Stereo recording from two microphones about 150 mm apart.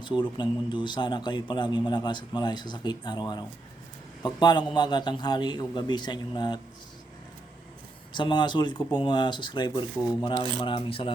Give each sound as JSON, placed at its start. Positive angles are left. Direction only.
{"t": 0.0, "sound": "speech", "side_deg": 30}
{"t": 8.1, "sound": "speech", "side_deg": 30}